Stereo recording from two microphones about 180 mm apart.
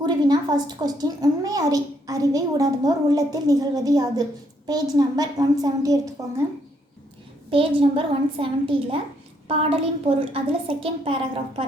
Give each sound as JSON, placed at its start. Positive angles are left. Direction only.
{"t": 0.0, "sound": "a woman's voice", "side_deg": -25}
{"t": 7.5, "sound": "a child's voice", "side_deg": -30}
{"t": 10.3, "sound": "a child's voice", "side_deg": -30}